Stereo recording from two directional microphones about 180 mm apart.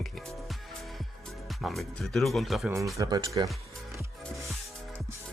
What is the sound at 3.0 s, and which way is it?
Speech, 25° right (ahead or behind).